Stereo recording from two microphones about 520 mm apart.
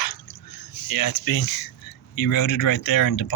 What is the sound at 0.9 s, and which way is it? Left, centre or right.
Speech, left.